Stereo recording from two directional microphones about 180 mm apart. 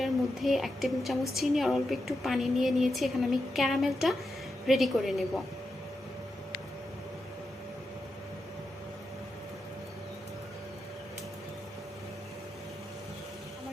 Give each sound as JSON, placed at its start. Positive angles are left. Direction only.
{"t": 0.0, "sound": "a woman's voice", "side_deg": 0}